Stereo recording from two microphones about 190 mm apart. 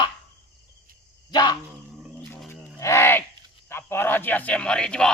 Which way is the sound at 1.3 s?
20° left (ahead or behind).